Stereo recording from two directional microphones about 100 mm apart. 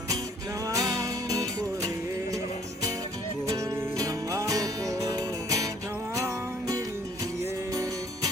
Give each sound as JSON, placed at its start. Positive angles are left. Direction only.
{"t": 0.6, "sound": "music", "side_deg": -35}
{"t": 3.5, "sound": "music", "side_deg": -40}